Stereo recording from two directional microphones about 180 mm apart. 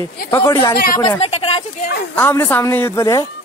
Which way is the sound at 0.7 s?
55° left (ahead or behind).